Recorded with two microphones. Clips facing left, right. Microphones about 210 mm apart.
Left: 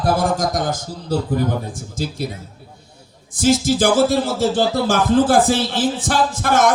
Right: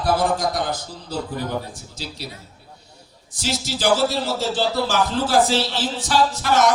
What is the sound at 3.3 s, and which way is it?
Music, 50° left (ahead or behind).